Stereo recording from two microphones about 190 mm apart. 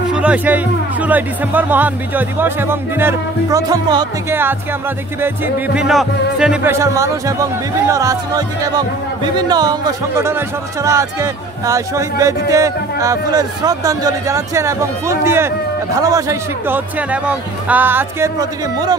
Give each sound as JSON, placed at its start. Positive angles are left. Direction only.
{"t": 0.1, "sound": "speech", "side_deg": -5}